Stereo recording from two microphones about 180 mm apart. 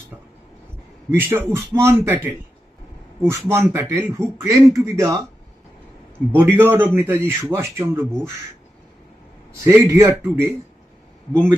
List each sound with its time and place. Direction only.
1.1 s a man's voice: 10° right (ahead or behind)
3.2 s a man's voice: 15° right (ahead or behind)
6.1 s a man's voice: 10° right (ahead or behind)
9.6 s a man's voice: 15° right (ahead or behind)